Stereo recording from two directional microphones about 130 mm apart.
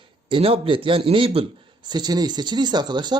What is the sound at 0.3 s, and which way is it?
A man's voice, 45° right (ahead or behind).